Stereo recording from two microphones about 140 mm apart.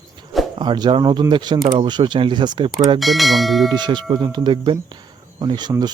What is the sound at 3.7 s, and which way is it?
Speech, 30° right (ahead or behind).